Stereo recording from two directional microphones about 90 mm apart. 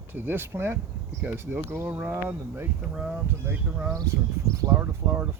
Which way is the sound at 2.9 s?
10° right (ahead or behind).